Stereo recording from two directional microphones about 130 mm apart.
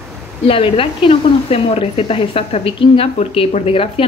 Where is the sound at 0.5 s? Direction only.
45° left (ahead or behind).